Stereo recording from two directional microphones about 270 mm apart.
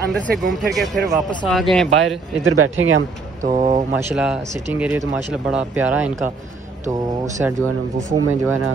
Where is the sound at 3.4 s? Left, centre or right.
Right.